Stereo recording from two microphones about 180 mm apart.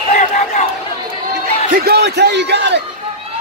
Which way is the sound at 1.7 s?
55° right (ahead or behind).